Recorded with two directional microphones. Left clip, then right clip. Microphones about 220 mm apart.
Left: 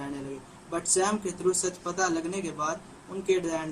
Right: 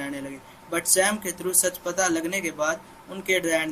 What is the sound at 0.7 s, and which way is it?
Speech, 25° right (ahead or behind).